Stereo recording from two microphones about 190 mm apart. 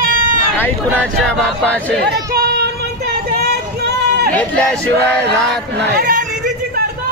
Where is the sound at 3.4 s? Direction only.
55° right (ahead or behind).